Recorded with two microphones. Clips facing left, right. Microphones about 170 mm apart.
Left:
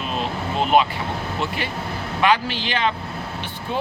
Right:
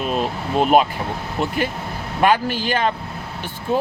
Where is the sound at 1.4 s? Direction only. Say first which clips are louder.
Right 4 dB; 45° right (ahead or behind).